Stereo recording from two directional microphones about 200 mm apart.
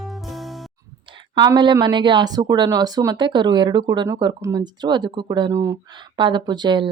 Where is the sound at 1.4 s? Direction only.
20° right (ahead or behind).